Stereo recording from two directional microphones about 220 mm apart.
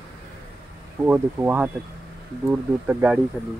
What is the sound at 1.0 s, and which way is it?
Speech, 10° right (ahead or behind).